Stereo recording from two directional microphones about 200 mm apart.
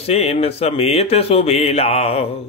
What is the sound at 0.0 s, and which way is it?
Speech, 30° left (ahead or behind).